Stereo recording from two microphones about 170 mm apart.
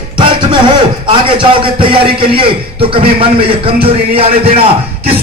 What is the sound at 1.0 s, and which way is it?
Speech, 30° right (ahead or behind).